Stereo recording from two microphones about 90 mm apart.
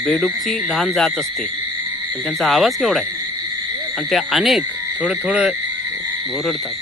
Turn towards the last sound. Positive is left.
turn(degrees=-10)  # may be behind; listen again after turning